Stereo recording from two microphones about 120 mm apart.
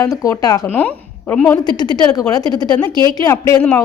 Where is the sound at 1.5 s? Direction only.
35° left (ahead or behind).